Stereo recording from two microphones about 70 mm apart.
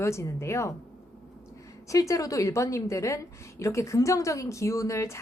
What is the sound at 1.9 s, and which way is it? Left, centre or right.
A woman's voice, left.